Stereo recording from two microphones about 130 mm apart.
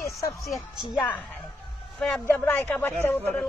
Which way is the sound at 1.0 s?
15° left (ahead or behind).